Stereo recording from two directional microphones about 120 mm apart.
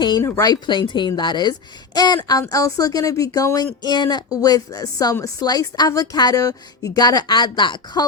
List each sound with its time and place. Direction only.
0.2 s a woman's voice: 25° left (ahead or behind)